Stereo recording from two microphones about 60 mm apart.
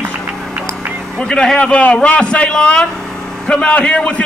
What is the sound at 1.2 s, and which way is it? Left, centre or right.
A man's voice, centre.